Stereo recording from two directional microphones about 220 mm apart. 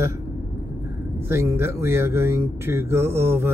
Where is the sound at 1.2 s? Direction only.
10° right (ahead or behind).